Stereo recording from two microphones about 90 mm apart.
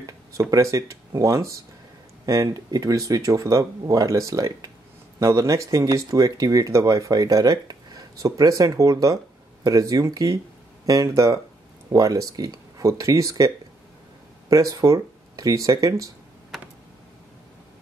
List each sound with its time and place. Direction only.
0.0 s speech: 40° right (ahead or behind)
14.5 s speech: 45° right (ahead or behind)